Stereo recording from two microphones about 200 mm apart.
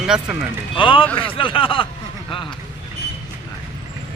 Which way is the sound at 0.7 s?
25° left (ahead or behind).